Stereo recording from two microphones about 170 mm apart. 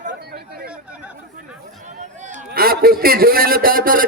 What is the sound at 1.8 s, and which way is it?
A man's voice, 45° right (ahead or behind).